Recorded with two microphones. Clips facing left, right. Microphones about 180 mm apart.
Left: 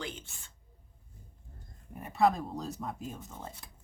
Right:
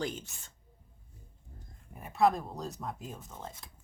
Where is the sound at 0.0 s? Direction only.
40° right (ahead or behind).